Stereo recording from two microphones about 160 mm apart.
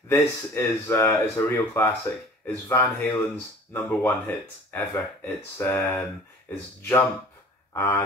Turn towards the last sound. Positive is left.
turn(degrees=15)  # may be behind; listen again after turning